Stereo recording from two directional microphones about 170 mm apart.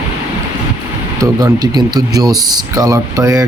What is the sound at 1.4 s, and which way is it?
Speech, 25° right (ahead or behind).